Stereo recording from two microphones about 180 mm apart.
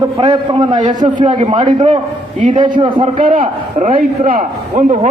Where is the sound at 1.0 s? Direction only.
40° right (ahead or behind).